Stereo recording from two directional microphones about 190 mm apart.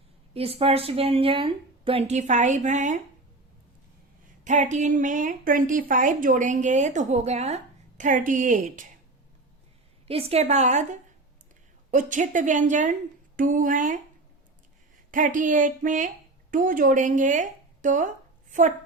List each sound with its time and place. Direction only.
0.3 s a woman's voice: 30° right (ahead or behind)
4.4 s a woman's voice: 40° right (ahead or behind)
10.1 s a woman's voice: 30° right (ahead or behind)
15.1 s speech: 45° right (ahead or behind)